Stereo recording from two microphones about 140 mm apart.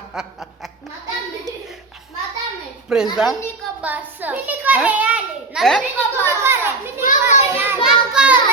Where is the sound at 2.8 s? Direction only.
5° right (ahead or behind).